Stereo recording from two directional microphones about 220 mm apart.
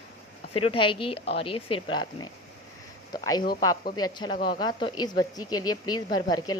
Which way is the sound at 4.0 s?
20° left (ahead or behind).